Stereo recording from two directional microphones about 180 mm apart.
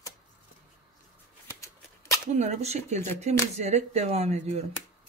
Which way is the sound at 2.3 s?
40° right (ahead or behind).